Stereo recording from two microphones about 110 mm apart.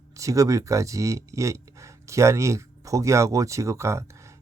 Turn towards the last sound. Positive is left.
turn(degrees=-25)  # may be behind; listen again after turning